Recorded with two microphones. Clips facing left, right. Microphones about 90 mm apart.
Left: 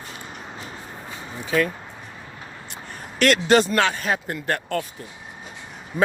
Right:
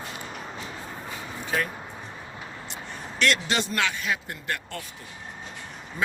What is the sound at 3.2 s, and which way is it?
Speech, 50° left (ahead or behind).